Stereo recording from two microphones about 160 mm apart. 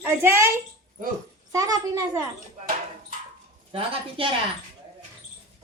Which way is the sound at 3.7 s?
35° right (ahead or behind).